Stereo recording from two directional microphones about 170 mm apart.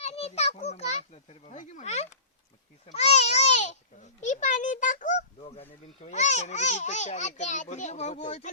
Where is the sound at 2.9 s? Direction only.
40° left (ahead or behind).